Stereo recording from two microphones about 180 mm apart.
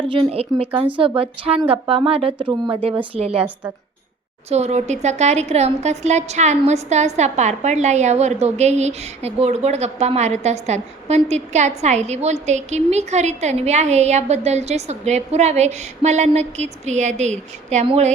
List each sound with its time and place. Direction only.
0.1 s speech: 30° right (ahead or behind)
4.4 s speech: 35° right (ahead or behind)